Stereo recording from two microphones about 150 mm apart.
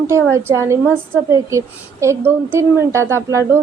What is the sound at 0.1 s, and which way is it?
Speech, 20° right (ahead or behind).